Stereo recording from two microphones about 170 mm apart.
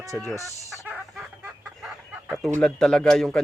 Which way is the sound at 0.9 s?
5° right (ahead or behind).